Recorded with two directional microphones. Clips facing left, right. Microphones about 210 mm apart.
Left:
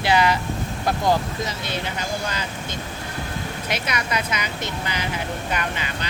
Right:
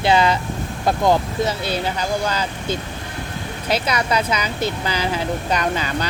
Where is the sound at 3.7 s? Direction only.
30° right (ahead or behind).